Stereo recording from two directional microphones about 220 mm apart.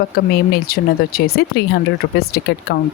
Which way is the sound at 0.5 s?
45° left (ahead or behind).